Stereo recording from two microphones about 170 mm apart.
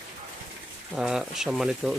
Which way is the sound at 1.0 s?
5° right (ahead or behind).